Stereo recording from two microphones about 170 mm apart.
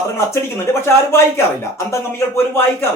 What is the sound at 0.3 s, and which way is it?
Speech, 15° left (ahead or behind).